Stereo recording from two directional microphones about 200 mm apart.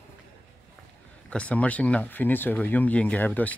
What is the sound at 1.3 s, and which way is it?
Speech, 5° left (ahead or behind).